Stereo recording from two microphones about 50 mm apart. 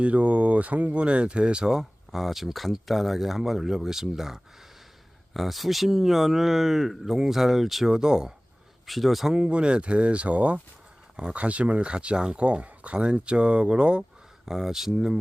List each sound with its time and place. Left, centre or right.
0.0 s speech: right; by 7.9 s centre
7.9 s speech: centre
8.9 s speech: centre
9.3 s speech: right